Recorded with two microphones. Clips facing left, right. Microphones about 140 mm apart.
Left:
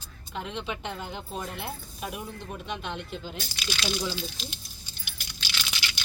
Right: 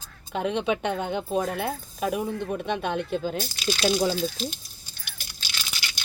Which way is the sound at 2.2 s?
60° right (ahead or behind).